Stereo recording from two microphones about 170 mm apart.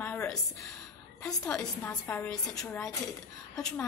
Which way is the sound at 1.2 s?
5° left (ahead or behind).